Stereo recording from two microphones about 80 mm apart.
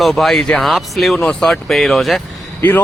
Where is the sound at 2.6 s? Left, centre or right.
Left.